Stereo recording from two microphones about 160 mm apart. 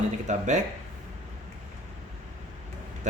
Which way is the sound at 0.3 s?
50° right (ahead or behind).